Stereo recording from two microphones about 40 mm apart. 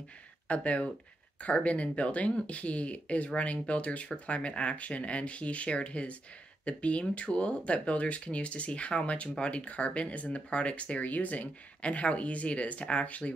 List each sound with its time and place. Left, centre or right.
0.5 s speech: left